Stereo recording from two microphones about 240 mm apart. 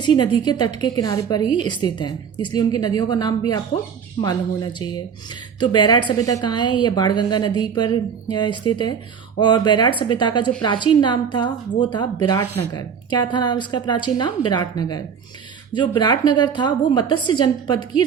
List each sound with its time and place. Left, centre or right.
0.0 s a woman's voice: centre